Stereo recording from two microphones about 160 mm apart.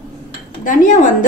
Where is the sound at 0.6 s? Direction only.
55° left (ahead or behind).